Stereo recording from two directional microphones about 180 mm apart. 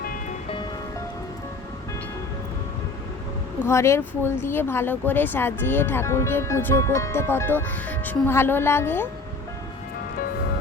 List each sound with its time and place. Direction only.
0.0 s music: 50° left (ahead or behind)
0.4 s music: 30° left (ahead or behind)
3.7 s speech: 15° left (ahead or behind)